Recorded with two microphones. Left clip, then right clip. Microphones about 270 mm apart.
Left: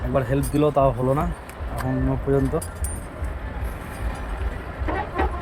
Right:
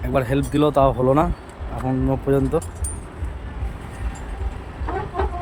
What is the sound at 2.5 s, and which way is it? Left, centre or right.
Speech, centre.